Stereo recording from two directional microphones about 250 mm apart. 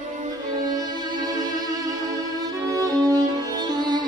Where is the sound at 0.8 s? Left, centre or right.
Centre.